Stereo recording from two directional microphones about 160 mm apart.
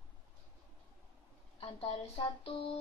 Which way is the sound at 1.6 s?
35° left (ahead or behind).